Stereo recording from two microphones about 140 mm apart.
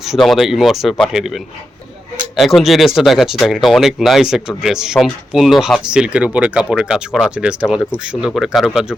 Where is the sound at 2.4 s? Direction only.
Centre (ahead or behind).